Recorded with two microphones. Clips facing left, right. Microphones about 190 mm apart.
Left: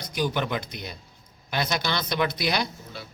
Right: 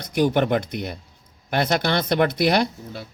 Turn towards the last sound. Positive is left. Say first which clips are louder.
# right 7 dB
turn(degrees=-60)  # may be behind; listen again after turning